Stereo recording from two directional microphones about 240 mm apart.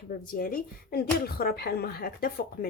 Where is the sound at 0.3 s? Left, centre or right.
Left.